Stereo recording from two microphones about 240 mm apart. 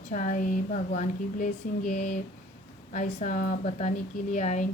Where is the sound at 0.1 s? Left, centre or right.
Left.